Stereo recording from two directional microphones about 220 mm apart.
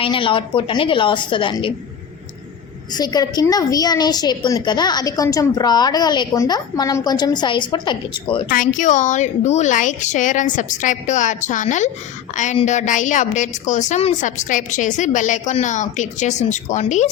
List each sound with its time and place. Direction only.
0.0 s a woman's voice: 25° left (ahead or behind)
2.9 s a woman's voice: 20° left (ahead or behind)
8.4 s a woman's voice: 40° left (ahead or behind)